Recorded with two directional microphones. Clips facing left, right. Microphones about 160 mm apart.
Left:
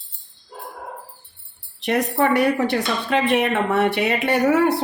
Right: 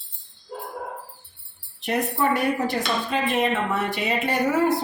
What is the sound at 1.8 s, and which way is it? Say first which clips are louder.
Speech: left 4 dB; 75° left (ahead or behind).